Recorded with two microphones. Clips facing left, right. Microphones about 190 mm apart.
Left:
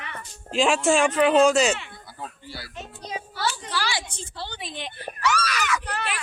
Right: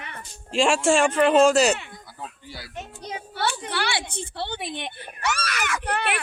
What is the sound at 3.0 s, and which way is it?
A woman's voice, 60° right (ahead or behind).